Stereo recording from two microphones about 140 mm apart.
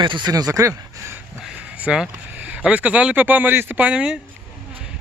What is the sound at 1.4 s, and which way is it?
Speech, 5° right (ahead or behind).